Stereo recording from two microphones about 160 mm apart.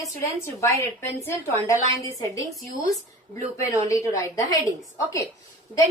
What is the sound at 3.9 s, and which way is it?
Speech, 20° left (ahead or behind).